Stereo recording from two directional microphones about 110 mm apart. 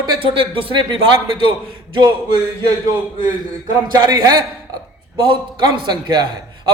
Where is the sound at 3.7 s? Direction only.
35° right (ahead or behind).